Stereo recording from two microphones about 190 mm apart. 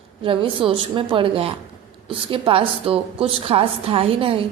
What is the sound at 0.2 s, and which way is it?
A woman's voice, 30° right (ahead or behind).